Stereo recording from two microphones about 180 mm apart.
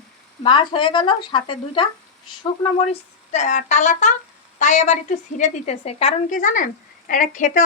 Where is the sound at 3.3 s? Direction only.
40° left (ahead or behind).